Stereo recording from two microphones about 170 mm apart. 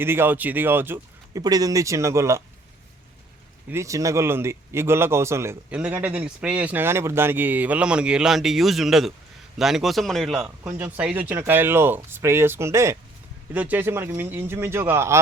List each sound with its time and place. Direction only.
0.0 s a man's voice: 15° right (ahead or behind)
3.7 s a man's voice: 15° right (ahead or behind); by 10.5 s centre (ahead or behind)
10.6 s a man's voice: 15° right (ahead or behind)